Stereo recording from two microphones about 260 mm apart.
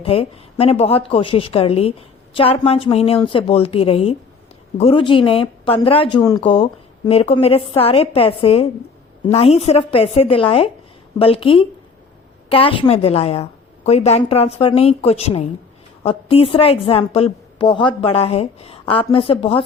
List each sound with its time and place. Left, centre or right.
0.0 s speech: left